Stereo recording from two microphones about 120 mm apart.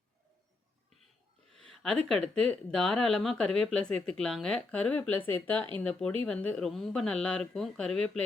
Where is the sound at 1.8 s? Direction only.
5° left (ahead or behind).